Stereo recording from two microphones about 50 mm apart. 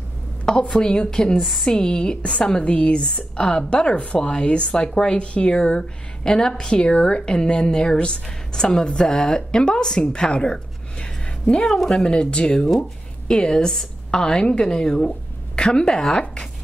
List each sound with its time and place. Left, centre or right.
0.7 s a woman's voice: centre